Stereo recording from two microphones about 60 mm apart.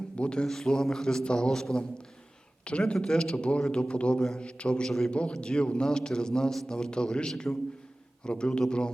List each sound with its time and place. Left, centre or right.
0.2 s a man's voice: centre